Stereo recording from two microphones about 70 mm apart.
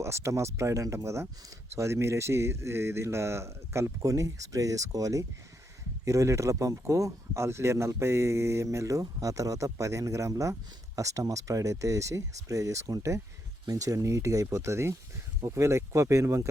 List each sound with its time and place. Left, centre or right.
0.0 s speech: right